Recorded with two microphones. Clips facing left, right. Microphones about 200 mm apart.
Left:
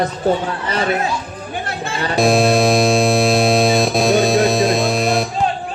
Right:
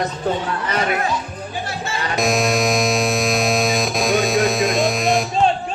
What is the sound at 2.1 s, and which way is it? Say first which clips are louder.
Music: left 5 dB; 30° left (ahead or behind).